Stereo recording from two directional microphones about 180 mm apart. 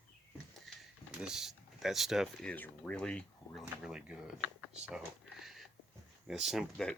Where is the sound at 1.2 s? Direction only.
5° right (ahead or behind).